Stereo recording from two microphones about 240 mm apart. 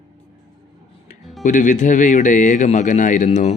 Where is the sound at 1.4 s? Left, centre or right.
Left.